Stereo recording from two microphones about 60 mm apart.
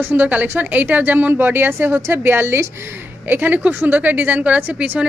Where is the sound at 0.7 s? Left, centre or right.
Right.